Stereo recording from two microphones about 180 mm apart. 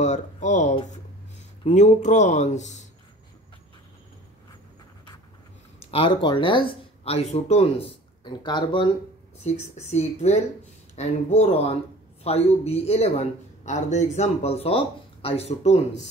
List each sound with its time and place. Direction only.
0.0 s speech: 40° left (ahead or behind)
5.8 s speech: 35° left (ahead or behind)
9.4 s speech: 35° left (ahead or behind)